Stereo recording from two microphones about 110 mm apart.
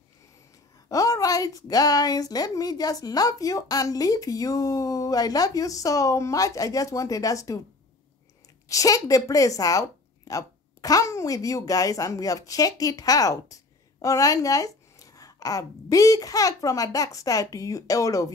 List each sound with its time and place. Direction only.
0.8 s a woman's voice: 30° left (ahead or behind)
8.6 s a woman's voice: 30° left (ahead or behind)